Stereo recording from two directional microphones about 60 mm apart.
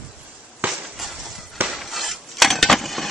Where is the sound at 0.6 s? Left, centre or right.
Right.